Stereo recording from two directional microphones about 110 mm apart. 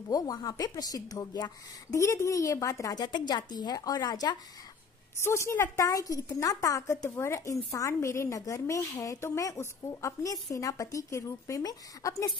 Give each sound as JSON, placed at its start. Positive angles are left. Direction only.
{"t": 0.1, "sound": "a woman's voice", "side_deg": 35}
{"t": 5.2, "sound": "a woman's voice", "side_deg": 25}